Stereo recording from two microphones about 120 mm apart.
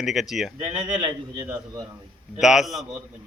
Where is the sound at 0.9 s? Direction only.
40° right (ahead or behind).